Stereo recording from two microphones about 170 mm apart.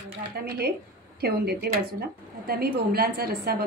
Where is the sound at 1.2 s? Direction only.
65° right (ahead or behind).